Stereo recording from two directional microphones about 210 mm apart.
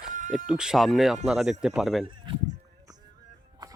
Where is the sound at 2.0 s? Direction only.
25° right (ahead or behind).